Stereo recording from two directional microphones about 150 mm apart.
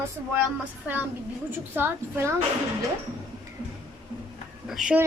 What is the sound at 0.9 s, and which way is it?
A woman's voice, 10° right (ahead or behind).